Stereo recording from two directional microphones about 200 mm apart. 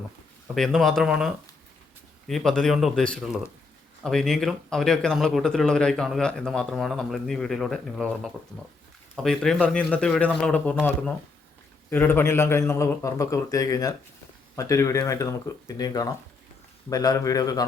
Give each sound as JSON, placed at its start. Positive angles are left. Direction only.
{"t": 0.4, "sound": "speech", "side_deg": 0}
{"t": 11.9, "sound": "a man's voice", "side_deg": 10}